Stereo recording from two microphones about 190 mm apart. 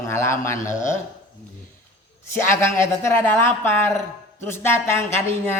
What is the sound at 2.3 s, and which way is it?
A man's voice, 15° left (ahead or behind).